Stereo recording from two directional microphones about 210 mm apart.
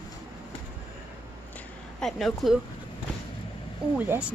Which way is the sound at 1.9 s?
Centre (ahead or behind).